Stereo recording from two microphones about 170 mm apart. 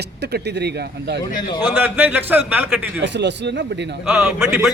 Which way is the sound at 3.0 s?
90° right.